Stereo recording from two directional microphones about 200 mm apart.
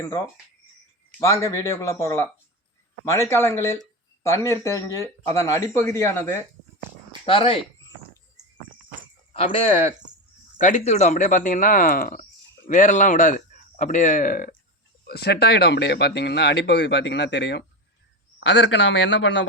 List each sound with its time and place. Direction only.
1.2 s speech: 15° left (ahead or behind)
7.3 s speech: 30° left (ahead or behind)
9.3 s speech: 30° left (ahead or behind); by 19.5 s 65° left (ahead or behind)